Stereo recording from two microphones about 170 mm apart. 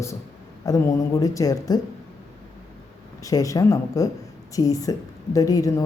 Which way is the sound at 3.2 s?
20° left (ahead or behind).